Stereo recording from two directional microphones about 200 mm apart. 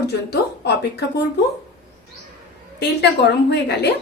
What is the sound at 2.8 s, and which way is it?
A woman's voice, 55° left (ahead or behind).